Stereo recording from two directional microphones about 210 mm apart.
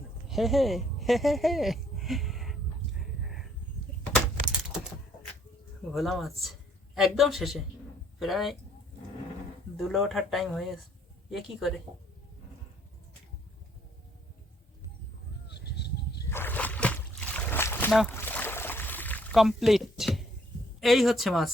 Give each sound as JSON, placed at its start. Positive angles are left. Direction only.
{"t": 0.3, "sound": "speech", "side_deg": 0}
{"t": 3.0, "sound": "a sound", "side_deg": 0}
{"t": 5.9, "sound": "speech", "side_deg": 0}
{"t": 9.7, "sound": "speech", "side_deg": 0}
{"t": 15.4, "sound": "goose", "side_deg": 55}
{"t": 16.3, "sound": "boat", "side_deg": 10}
{"t": 20.8, "sound": "speech", "side_deg": 0}